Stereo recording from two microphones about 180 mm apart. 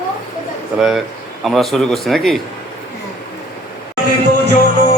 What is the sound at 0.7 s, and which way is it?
A man's voice, centre (ahead or behind).